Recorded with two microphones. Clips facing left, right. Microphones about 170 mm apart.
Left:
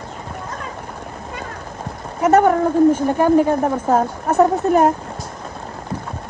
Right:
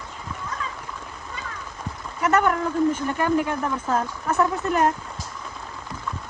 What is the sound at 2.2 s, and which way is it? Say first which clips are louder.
A woman's voice: left 7 dB; 40° left (ahead or behind).